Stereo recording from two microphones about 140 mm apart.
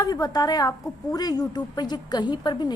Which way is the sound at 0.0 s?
25° left (ahead or behind).